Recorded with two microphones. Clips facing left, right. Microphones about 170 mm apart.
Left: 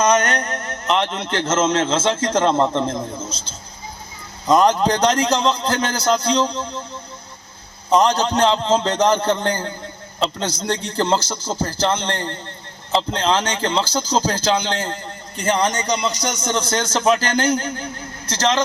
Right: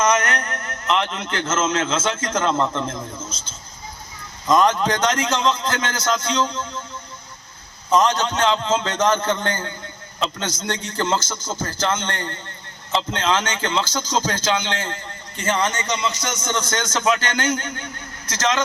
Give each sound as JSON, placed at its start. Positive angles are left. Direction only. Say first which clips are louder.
{"t": 0.0, "sound": "speech", "louder": "left 3 dB", "side_deg": 30}
{"t": 7.9, "sound": "speech", "louder": "left 2 dB", "side_deg": 35}